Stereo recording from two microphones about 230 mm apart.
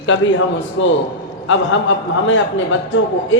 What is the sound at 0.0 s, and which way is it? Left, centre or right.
Speech, left.